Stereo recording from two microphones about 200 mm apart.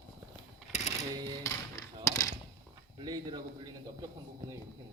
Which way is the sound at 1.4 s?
15° left (ahead or behind).